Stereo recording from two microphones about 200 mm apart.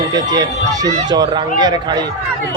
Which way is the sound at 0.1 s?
20° right (ahead or behind).